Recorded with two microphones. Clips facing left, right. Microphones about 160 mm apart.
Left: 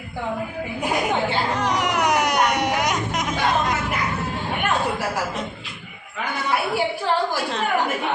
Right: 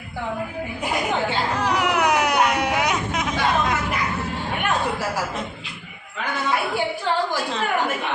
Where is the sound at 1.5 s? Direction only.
5° right (ahead or behind).